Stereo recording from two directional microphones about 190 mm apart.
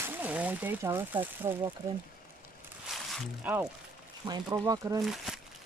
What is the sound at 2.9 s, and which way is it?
Speech, 5° right (ahead or behind).